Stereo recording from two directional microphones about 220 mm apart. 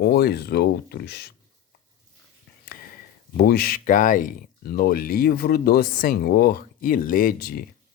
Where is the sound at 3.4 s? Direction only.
45° left (ahead or behind).